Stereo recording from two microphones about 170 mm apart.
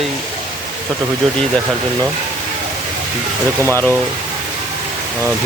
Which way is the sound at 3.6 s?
15° right (ahead or behind).